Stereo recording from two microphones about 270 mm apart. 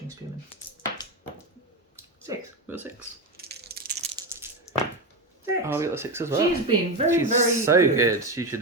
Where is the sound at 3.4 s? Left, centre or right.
Right.